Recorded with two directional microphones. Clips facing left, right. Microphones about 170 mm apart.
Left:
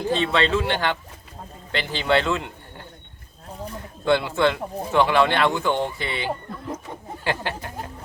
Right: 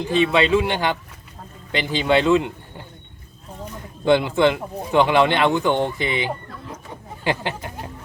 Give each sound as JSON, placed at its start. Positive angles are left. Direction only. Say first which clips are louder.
{"t": 0.1, "sound": "speech", "louder": "right 4 dB", "side_deg": -15}
{"t": 4.0, "sound": "speech", "louder": "right 3 dB", "side_deg": -15}